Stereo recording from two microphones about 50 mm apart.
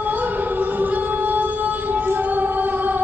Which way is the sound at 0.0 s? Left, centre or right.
Right.